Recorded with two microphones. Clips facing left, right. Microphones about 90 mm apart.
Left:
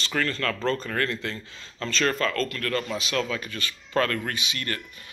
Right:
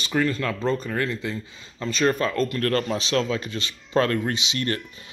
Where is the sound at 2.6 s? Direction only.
40° right (ahead or behind).